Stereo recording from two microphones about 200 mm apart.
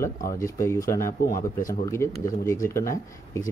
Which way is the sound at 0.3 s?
15° left (ahead or behind).